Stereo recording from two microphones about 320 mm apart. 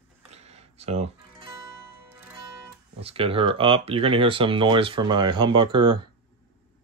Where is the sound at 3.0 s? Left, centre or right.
Centre.